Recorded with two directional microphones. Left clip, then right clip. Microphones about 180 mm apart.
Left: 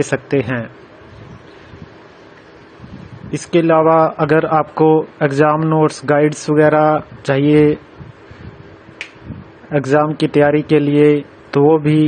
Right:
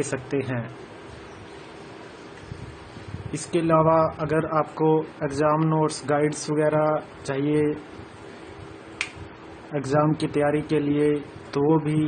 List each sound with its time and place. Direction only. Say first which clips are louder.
0.0 s a man's voice: left 10 dB; 35° left (ahead or behind)
3.3 s a man's voice: left 9 dB; 35° left (ahead or behind)
9.7 s a man's voice: left 9 dB; 40° left (ahead or behind)